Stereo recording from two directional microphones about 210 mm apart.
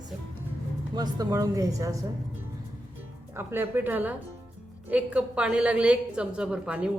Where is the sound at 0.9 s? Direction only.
20° right (ahead or behind).